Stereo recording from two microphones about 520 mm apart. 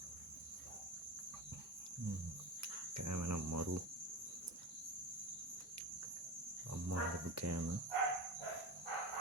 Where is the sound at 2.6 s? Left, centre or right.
Right.